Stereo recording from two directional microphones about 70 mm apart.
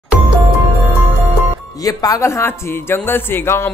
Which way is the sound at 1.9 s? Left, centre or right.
Left.